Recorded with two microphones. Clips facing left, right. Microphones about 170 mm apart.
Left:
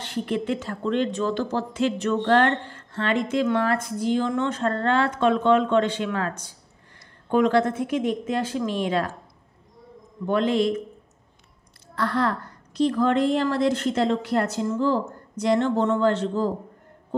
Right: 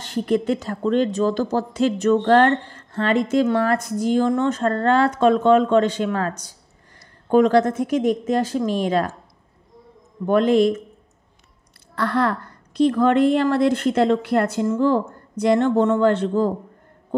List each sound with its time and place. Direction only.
0.0 s speech: 40° right (ahead or behind)
10.2 s a man's voice: 50° right (ahead or behind)
11.9 s a woman's voice: 60° right (ahead or behind)